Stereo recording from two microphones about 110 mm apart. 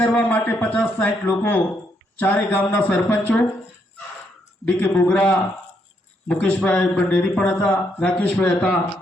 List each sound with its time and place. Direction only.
0.0 s a man's voice: 20° left (ahead or behind)
4.6 s a man's voice: 15° left (ahead or behind)